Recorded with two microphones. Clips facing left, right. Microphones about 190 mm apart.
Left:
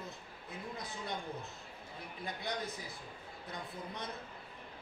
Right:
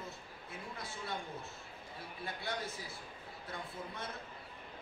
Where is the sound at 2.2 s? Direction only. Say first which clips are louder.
Left 1 dB; 15° left (ahead or behind).